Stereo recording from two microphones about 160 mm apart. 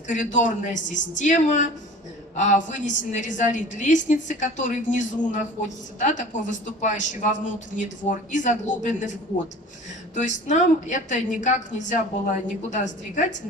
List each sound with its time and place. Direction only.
0.1 s a woman's voice: 50° left (ahead or behind)
10.2 s a woman's voice: 50° left (ahead or behind)